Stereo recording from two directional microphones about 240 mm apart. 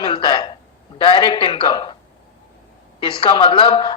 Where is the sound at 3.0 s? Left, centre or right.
Left.